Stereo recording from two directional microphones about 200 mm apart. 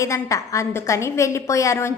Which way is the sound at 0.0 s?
15° left (ahead or behind).